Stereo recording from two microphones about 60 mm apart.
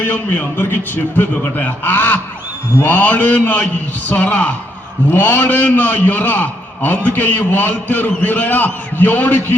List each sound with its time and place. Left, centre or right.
0.0 s a man's voice: left